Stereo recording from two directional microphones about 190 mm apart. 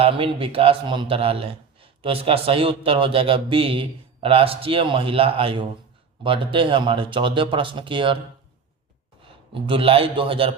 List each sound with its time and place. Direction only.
0.0 s speech: 30° right (ahead or behind)
9.6 s speech: 25° right (ahead or behind)